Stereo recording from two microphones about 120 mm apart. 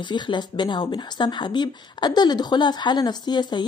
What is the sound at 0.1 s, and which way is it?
Speech, 40° left (ahead or behind).